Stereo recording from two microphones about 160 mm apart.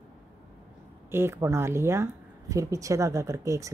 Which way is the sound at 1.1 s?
15° right (ahead or behind).